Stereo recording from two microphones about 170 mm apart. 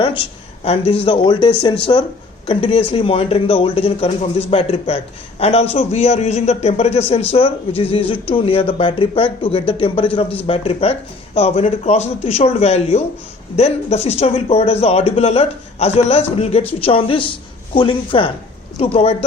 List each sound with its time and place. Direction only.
0.6 s speech: 35° left (ahead or behind)